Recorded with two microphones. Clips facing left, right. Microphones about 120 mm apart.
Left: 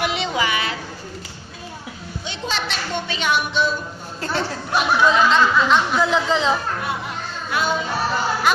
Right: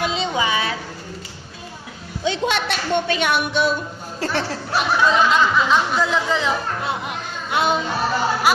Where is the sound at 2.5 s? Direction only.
55° right (ahead or behind).